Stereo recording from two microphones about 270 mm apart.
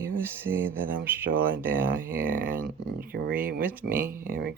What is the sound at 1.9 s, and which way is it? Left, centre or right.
Speech, right.